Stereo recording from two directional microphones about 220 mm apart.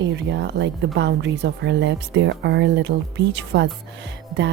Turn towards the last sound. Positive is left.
turn(degrees=-55)  # may be behind; listen again after turning